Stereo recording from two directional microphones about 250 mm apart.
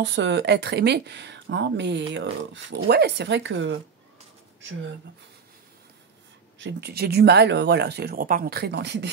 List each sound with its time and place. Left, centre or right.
0.0 s speech: right
6.6 s speech: right